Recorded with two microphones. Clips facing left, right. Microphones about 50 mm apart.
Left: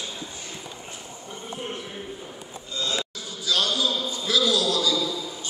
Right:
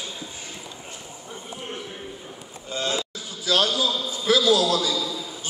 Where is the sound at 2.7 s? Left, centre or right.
Right.